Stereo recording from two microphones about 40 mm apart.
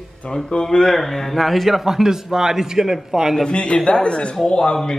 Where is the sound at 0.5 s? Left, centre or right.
Left; by 3.3 s centre.